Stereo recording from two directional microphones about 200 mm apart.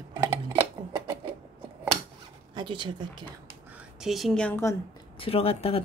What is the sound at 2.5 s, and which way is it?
Speech, 25° right (ahead or behind).